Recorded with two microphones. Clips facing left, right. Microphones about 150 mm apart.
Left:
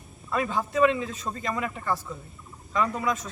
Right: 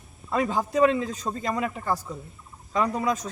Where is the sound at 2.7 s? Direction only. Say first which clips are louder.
Right 2 dB; 35° right (ahead or behind).